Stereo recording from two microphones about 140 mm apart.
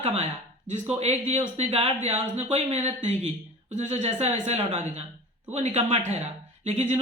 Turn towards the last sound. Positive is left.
turn(degrees=-50)  # may be behind; listen again after turning